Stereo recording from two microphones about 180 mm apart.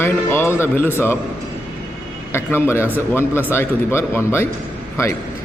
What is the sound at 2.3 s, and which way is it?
Speech, 10° left (ahead or behind).